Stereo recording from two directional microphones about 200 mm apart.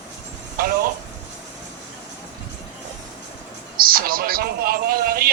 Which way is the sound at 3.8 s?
45° right (ahead or behind).